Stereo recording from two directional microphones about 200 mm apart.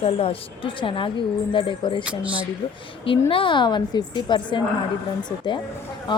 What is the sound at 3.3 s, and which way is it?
Speech, 25° left (ahead or behind).